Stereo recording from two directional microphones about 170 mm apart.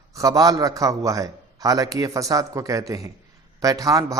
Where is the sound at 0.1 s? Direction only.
20° right (ahead or behind).